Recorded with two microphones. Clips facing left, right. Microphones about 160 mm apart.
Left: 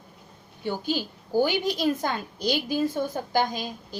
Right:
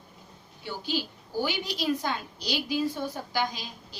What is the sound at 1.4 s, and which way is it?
A woman's voice, 45° left (ahead or behind).